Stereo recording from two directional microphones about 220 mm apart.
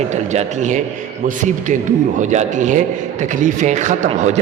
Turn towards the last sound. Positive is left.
turn(degrees=-30)  # may be behind; listen again after turning